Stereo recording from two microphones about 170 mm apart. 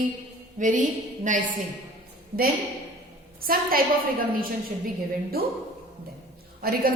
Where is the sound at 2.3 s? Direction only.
65° right (ahead or behind).